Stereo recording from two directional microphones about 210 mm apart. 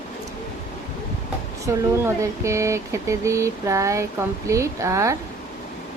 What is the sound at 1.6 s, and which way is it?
Speech, 15° right (ahead or behind).